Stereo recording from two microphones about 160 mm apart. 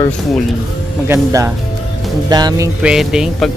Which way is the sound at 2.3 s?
25° right (ahead or behind).